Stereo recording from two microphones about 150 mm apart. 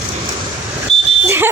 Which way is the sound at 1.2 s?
15° right (ahead or behind).